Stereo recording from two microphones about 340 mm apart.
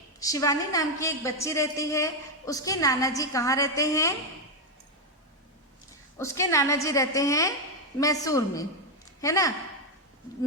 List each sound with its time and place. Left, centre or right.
0.2 s a woman's voice: centre
6.1 s a woman's voice: centre